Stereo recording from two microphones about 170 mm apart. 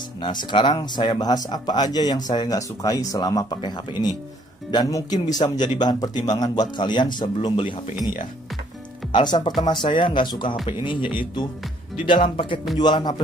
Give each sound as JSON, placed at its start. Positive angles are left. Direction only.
{"t": 0.2, "sound": "speech", "side_deg": 25}
{"t": 9.1, "sound": "speech", "side_deg": 25}